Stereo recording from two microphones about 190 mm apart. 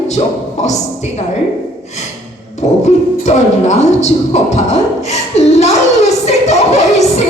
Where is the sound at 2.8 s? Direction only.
35° left (ahead or behind).